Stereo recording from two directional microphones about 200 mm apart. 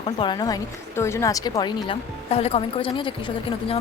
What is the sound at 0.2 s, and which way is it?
Speech, 20° left (ahead or behind).